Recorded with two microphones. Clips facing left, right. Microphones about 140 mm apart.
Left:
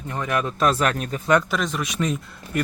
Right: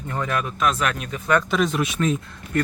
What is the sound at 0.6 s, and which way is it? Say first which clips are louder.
Speech: left 3 dB; 35° left (ahead or behind).